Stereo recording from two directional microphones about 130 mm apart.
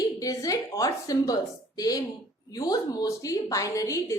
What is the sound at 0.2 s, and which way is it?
A woman's voice, 25° left (ahead or behind).